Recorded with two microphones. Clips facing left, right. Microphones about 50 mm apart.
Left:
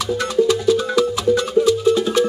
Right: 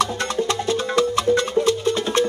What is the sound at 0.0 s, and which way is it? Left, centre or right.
Music, right.